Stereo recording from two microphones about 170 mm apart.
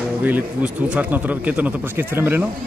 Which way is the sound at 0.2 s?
10° right (ahead or behind).